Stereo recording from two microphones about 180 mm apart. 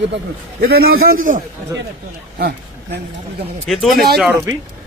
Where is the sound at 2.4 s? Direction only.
65° right (ahead or behind).